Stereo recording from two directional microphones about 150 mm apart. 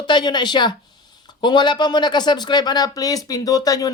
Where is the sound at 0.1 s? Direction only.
30° left (ahead or behind).